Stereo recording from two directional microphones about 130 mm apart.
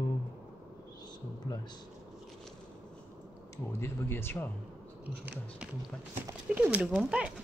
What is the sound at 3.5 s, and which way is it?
Speech, 20° left (ahead or behind).